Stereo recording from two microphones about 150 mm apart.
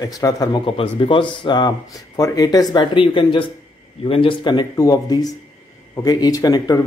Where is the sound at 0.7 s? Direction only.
35° left (ahead or behind).